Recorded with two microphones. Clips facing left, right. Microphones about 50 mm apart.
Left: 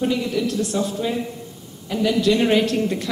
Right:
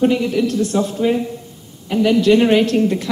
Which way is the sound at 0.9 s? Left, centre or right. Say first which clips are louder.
Right 7 dB; right.